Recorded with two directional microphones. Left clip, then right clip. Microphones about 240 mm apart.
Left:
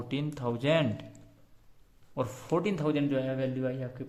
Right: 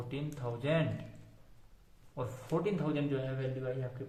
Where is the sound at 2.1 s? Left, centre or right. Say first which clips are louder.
Left 6 dB; left.